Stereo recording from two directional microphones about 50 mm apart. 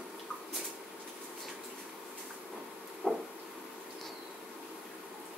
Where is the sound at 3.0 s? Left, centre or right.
Left.